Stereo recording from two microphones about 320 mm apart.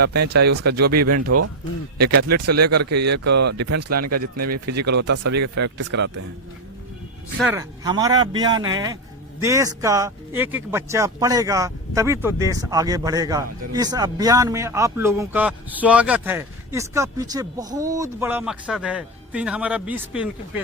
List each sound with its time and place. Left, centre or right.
0.0 s speech: right
3.3 s speech: right
3.8 s speech: right
4.9 s speech: right
5.4 s speech: right
5.7 s speech: right
7.3 s speech: centre